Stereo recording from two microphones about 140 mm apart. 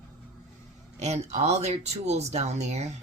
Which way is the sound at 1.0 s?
50° right (ahead or behind).